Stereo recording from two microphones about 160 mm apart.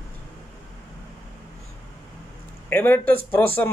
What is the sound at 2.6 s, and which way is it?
Speech, 10° left (ahead or behind).